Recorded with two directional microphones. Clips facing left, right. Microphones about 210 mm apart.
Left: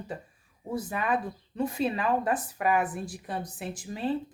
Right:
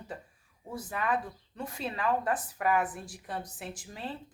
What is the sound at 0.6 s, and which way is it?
Speech, 15° left (ahead or behind).